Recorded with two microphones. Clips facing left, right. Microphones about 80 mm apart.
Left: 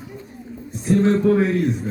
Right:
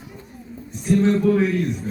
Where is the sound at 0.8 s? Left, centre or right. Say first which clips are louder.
Left 1 dB; left.